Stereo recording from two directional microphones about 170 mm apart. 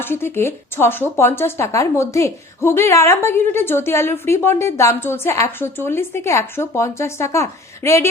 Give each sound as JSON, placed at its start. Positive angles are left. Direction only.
{"t": 0.0, "sound": "speech", "side_deg": 15}